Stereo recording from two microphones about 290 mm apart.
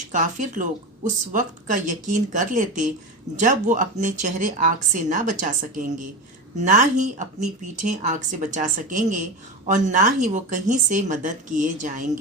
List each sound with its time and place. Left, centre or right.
0.1 s speech: right
6.7 s speech: right